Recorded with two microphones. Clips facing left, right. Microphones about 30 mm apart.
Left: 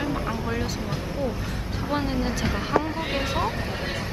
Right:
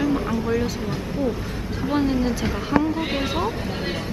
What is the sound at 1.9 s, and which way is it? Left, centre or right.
Speech, centre.